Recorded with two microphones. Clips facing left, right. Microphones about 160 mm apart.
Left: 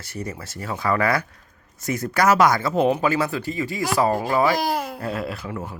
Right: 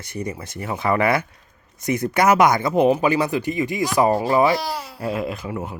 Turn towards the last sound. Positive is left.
turn(degrees=-15)  # may be behind; listen again after turning